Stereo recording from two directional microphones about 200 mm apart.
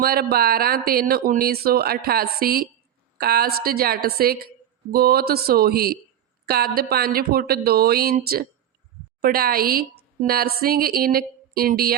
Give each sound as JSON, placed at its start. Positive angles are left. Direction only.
{"t": 0.0, "sound": "speech", "side_deg": -50}
{"t": 9.2, "sound": "speech", "side_deg": -50}